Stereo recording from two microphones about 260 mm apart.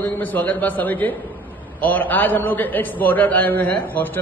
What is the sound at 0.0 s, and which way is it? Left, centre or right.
A man's voice, centre.